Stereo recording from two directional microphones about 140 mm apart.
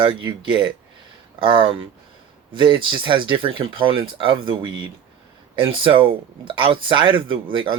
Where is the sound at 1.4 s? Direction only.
35° right (ahead or behind).